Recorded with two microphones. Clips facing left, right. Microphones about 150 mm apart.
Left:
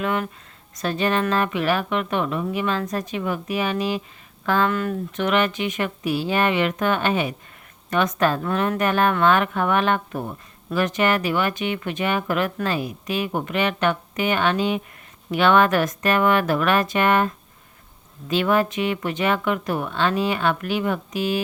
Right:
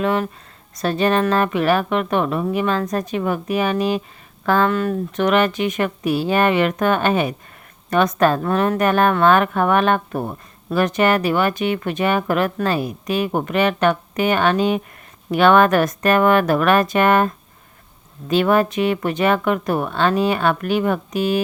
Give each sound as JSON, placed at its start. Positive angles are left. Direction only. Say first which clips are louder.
{"t": 0.0, "sound": "a woman's voice", "louder": "right 4 dB", "side_deg": -35}